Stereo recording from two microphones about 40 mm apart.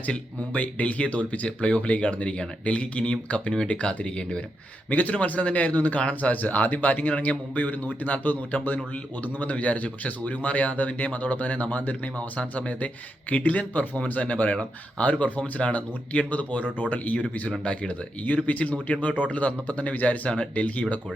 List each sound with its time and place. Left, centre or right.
0.5 s speech: left
4.9 s speech: left
17.6 s speech: left